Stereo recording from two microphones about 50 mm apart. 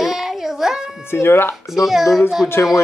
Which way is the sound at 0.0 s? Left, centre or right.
Centre.